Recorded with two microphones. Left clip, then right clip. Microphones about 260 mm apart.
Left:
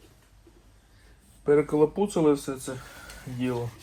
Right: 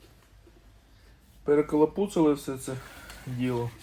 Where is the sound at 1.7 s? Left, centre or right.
Left.